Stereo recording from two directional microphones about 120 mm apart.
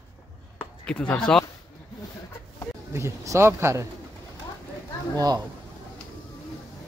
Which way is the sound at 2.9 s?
25° right (ahead or behind).